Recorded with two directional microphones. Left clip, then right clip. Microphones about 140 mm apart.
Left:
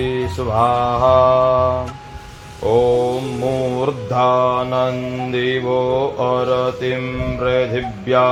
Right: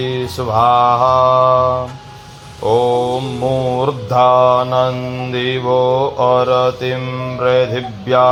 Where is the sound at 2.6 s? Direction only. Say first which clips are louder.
Right 1 dB; 45° right (ahead or behind).